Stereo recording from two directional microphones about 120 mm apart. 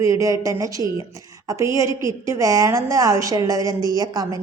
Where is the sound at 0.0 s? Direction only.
25° right (ahead or behind).